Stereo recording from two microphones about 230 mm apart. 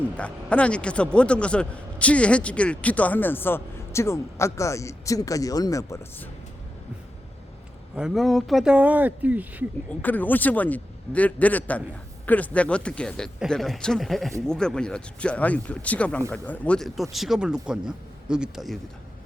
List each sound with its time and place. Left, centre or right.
0.2 s a man's voice: centre
7.9 s speech: centre
9.9 s a man's voice: centre